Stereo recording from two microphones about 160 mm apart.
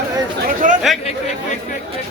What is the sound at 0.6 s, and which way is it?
Chatter, 55° right (ahead or behind).